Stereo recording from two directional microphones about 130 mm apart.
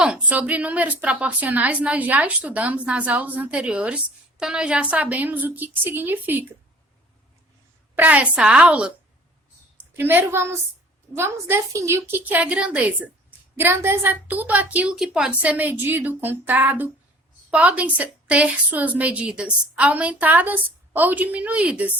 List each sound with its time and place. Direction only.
0.0 s a woman's voice: 10° right (ahead or behind)
7.9 s a woman's voice: 10° right (ahead or behind)
9.9 s a woman's voice: 15° right (ahead or behind)